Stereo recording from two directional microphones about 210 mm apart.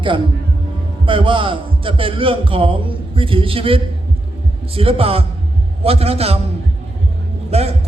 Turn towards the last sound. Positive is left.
turn(degrees=-30)  # may be behind; listen again after turning